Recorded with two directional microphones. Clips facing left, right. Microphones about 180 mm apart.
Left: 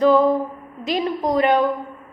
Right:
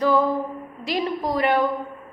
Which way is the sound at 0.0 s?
20° left (ahead or behind).